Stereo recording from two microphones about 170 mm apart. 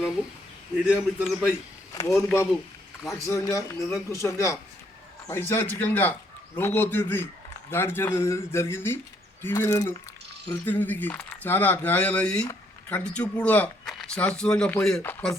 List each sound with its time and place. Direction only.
0.9 s a man's voice: centre (ahead or behind)
2.1 s a man's voice: 15° left (ahead or behind)